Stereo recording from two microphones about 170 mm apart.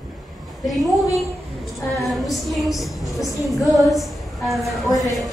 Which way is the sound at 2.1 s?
Centre (ahead or behind).